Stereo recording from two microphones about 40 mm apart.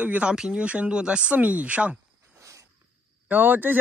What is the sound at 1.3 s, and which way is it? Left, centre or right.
Speech, right.